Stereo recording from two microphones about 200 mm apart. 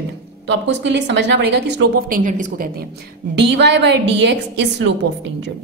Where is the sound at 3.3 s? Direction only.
60° right (ahead or behind).